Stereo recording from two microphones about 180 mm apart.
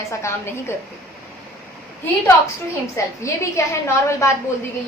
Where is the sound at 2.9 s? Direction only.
15° left (ahead or behind).